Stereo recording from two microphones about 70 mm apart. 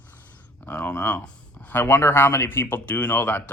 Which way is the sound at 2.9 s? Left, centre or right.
Left.